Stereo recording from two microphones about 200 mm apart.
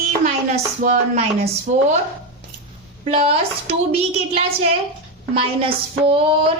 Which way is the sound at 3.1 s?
30° right (ahead or behind).